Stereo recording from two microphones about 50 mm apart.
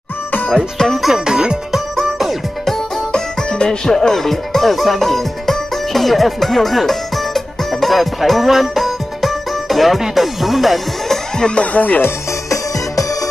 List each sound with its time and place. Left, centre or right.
0.7 s music: centre
2.0 s music: centre
3.1 s music: centre
11.3 s speech: centre
11.6 s speech: left